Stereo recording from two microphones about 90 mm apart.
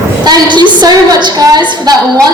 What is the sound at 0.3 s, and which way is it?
A woman's voice, 55° right (ahead or behind).